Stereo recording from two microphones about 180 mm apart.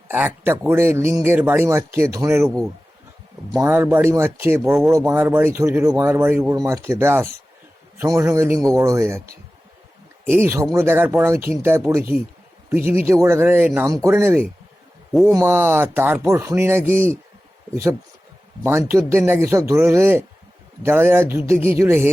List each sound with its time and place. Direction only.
0.1 s speech: 10° right (ahead or behind)
10.2 s speech: 10° right (ahead or behind)
18.6 s speech: 15° right (ahead or behind)